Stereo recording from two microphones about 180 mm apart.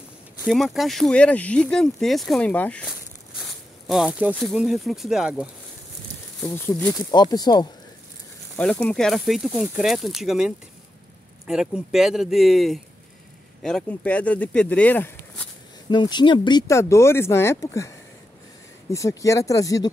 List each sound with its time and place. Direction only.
0.5 s speech: centre (ahead or behind)
6.4 s speech: 15° left (ahead or behind)
7.0 s speech: 20° left (ahead or behind)
8.5 s speech: 5° left (ahead or behind)
15.9 s speech: 25° left (ahead or behind)